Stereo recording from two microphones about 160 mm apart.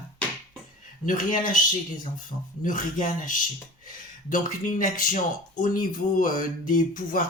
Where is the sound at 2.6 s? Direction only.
55° left (ahead or behind).